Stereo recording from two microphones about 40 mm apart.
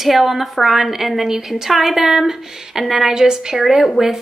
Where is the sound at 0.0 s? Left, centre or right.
Centre.